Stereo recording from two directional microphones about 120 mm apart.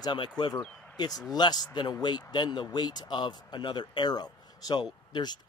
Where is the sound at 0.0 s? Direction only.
40° left (ahead or behind).